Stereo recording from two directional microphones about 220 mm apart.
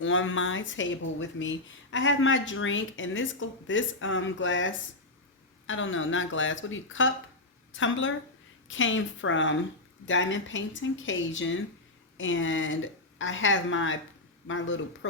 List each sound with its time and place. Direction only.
0.0 s speech: 60° left (ahead or behind)